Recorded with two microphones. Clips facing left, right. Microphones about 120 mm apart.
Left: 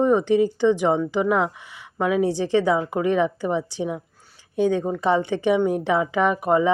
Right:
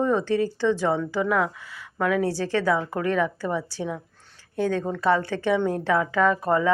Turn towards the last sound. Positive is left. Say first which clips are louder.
# left 2 dB
turn(degrees=15)  # may be behind; listen again after turning